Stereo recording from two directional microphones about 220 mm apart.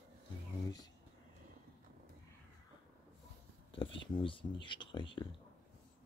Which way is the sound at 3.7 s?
25° left (ahead or behind).